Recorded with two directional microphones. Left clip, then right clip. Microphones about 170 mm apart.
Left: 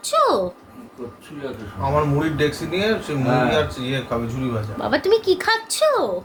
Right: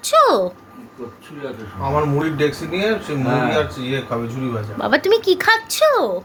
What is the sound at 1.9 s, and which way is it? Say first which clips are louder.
Speech: right 2 dB; 10° left (ahead or behind).